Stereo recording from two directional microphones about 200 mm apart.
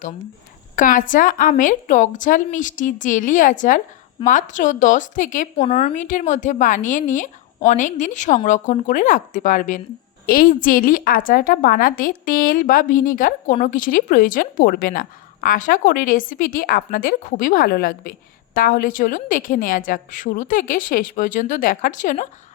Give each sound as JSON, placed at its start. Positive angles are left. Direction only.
{"t": 0.8, "sound": "a woman's voice", "side_deg": 40}
{"t": 5.6, "sound": "a woman's voice", "side_deg": 30}